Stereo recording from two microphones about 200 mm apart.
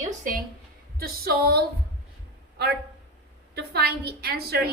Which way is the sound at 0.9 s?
50° right (ahead or behind).